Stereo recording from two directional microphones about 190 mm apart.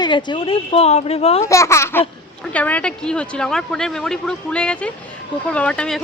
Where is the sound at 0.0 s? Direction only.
25° left (ahead or behind).